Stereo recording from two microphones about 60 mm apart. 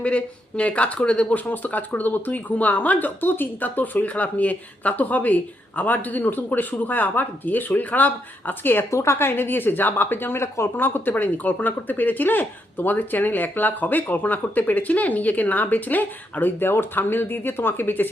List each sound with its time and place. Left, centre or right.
0.0 s speech: left
8.9 s speech: left
10.8 s speech: left